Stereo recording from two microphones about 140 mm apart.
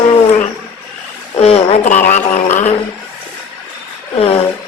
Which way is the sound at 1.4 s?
45° left (ahead or behind).